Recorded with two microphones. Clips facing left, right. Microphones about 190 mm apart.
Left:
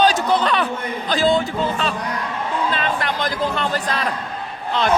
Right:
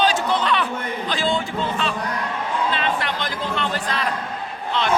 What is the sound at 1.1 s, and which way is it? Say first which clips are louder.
Music: left 6 dB; 40° left (ahead or behind).